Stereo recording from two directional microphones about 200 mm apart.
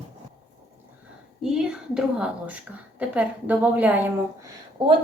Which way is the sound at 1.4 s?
Centre (ahead or behind).